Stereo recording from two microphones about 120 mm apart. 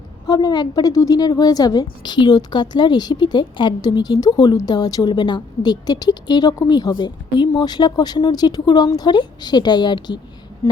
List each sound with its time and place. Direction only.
0.3 s a woman's voice: 35° left (ahead or behind)